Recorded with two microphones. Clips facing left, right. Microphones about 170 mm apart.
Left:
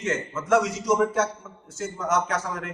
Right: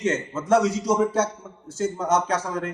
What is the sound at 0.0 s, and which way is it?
A man's voice, 30° right (ahead or behind).